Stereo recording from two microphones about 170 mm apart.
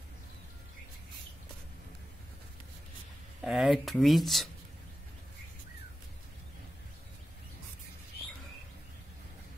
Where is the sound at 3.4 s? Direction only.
Centre (ahead or behind).